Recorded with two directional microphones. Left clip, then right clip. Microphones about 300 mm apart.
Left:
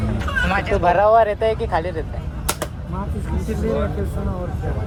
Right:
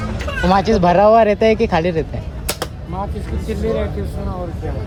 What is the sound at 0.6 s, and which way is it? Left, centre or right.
Speech, right.